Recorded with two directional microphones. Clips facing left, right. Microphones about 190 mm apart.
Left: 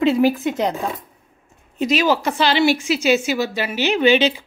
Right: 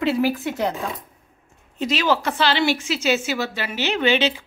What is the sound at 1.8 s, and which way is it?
A woman's voice, 15° left (ahead or behind).